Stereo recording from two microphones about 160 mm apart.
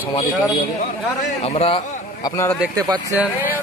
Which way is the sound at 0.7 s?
45° left (ahead or behind).